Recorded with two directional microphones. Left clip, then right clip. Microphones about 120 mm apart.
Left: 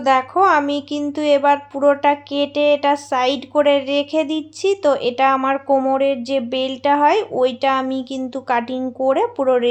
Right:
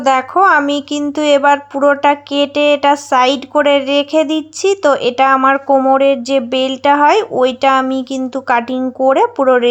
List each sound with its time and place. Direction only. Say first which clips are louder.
0.0 s speech: right 4 dB; 35° right (ahead or behind)